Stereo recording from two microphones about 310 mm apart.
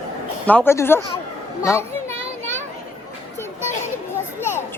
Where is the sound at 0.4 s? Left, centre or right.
Centre.